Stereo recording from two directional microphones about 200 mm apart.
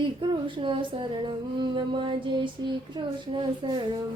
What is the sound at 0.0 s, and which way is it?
Music, 25° right (ahead or behind).